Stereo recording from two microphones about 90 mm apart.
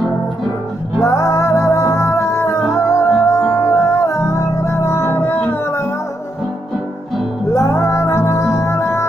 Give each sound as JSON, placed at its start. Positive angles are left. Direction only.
{"t": 1.0, "sound": "music", "side_deg": 35}
{"t": 7.5, "sound": "music", "side_deg": 30}